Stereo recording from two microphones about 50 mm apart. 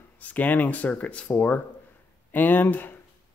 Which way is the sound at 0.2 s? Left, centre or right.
Left.